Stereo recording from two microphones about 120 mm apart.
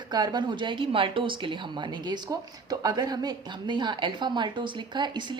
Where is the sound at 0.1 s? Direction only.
35° right (ahead or behind).